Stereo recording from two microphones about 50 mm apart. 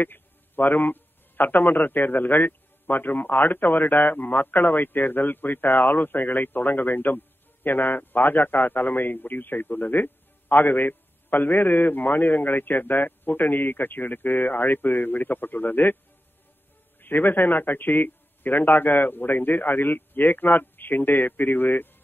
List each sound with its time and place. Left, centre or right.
0.0 s a man's voice: left
17.0 s a man's voice: left